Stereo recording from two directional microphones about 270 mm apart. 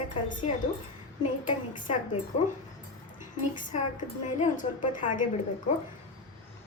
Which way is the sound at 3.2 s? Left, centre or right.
Left.